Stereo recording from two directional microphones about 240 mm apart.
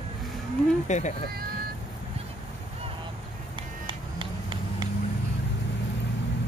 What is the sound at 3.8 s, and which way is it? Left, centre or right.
Vehicle, centre.